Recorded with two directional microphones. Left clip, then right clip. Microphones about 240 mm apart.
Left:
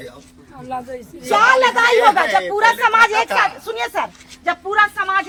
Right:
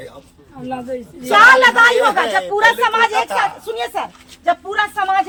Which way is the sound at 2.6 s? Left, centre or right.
Centre.